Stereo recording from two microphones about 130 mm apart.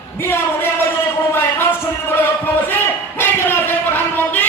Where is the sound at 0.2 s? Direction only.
15° left (ahead or behind).